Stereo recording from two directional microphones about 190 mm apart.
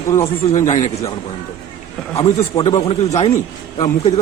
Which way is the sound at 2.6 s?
35° left (ahead or behind).